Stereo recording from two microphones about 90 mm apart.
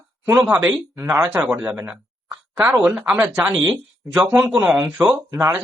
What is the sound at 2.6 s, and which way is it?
Speech, 25° right (ahead or behind).